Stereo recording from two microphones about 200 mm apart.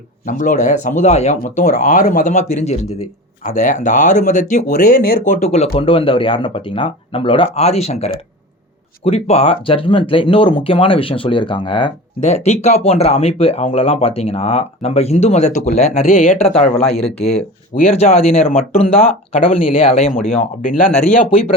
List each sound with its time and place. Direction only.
0.3 s speech: 40° left (ahead or behind)
17.7 s speech: 35° left (ahead or behind)